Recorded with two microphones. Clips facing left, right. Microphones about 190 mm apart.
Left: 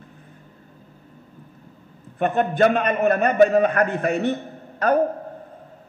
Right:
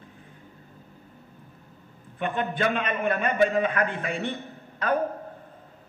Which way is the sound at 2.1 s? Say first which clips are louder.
Left 8 dB; 45° left (ahead or behind).